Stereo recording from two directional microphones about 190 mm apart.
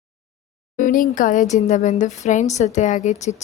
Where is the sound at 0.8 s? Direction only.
45° left (ahead or behind).